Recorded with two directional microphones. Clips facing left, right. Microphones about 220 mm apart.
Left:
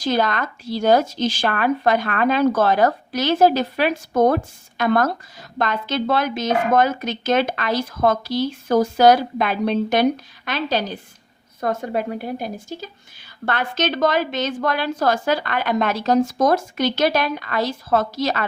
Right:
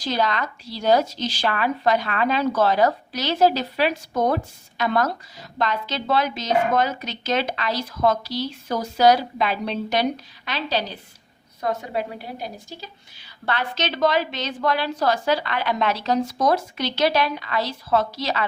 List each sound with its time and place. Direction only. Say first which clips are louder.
0.0 s speech: left 3 dB; 50° left (ahead or behind)